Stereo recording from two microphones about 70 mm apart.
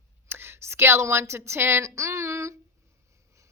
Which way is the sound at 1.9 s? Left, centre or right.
Right.